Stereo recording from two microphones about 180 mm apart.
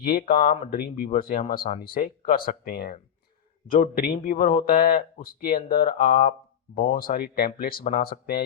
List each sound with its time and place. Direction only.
0.0 s speech: 55° left (ahead or behind)